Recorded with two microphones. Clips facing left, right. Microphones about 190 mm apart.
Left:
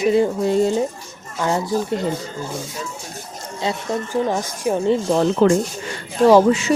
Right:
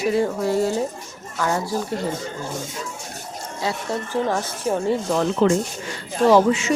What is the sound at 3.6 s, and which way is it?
Speech, 20° left (ahead or behind).